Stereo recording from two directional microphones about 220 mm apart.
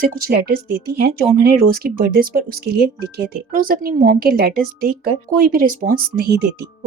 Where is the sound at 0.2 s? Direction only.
45° right (ahead or behind).